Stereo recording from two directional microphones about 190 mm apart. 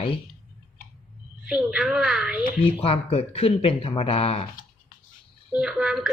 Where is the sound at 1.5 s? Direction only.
5° right (ahead or behind).